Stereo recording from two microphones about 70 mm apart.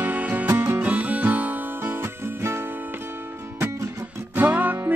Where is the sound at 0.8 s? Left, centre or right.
Right.